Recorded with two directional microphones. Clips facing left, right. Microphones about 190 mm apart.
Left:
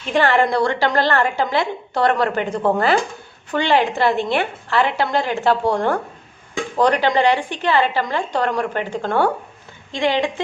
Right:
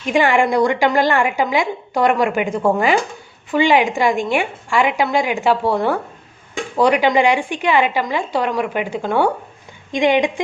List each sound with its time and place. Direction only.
0.0 s a woman's voice: 10° right (ahead or behind)